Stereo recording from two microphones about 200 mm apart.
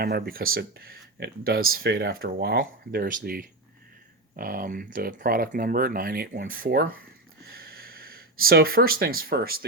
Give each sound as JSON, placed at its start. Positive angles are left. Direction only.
{"t": 0.0, "sound": "speech", "side_deg": -50}